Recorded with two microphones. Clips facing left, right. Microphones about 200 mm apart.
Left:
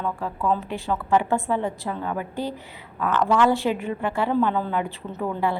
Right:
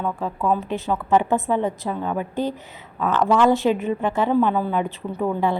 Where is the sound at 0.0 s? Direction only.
15° right (ahead or behind).